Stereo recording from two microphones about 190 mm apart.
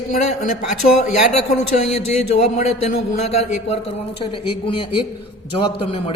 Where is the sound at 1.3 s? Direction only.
35° left (ahead or behind).